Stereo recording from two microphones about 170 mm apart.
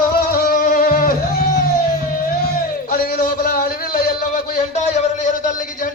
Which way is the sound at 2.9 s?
60° left (ahead or behind).